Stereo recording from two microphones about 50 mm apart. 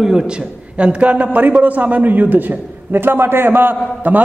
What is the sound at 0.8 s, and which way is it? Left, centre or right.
A man's voice, right.